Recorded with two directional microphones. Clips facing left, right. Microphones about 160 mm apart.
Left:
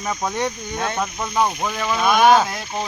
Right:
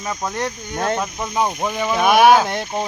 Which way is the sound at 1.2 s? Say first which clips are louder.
Left 1 dB; 15° right (ahead or behind).